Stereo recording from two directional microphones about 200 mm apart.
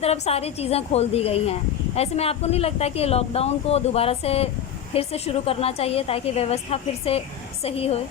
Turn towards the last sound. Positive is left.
turn(degrees=30)  # may be behind; listen again after turning